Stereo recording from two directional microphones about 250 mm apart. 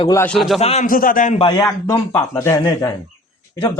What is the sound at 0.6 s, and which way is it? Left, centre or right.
A man's voice, left.